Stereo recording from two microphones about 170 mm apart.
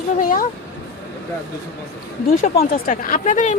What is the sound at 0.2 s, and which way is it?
Speech, 50° left (ahead or behind).